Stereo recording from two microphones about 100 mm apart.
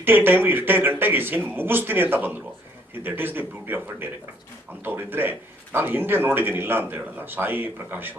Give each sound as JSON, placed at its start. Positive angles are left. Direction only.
{"t": 0.0, "sound": "a man's voice", "side_deg": -20}